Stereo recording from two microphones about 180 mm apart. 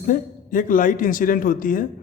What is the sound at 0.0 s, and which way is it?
A man's voice, 50° left (ahead or behind).